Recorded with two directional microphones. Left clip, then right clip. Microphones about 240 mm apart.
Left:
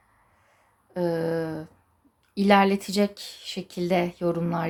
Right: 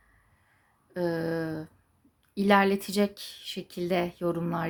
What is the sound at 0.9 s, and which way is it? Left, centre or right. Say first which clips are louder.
Speech: left 4 dB; centre.